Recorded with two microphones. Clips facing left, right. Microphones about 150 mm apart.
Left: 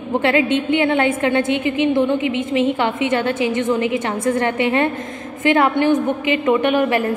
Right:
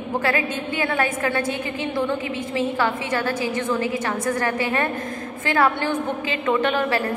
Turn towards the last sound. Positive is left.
turn(degrees=15)  # may be behind; listen again after turning